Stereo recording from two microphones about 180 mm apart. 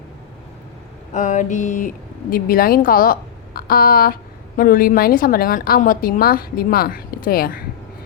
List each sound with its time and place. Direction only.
1.1 s a woman's voice: 45° left (ahead or behind)
2.3 s a woman's voice: 55° left (ahead or behind)